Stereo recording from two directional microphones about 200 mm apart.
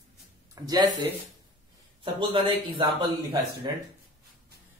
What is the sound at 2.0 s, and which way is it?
Speech, 25° right (ahead or behind).